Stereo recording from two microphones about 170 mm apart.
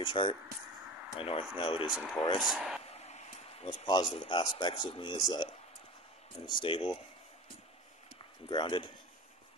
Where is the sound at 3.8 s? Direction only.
25° left (ahead or behind).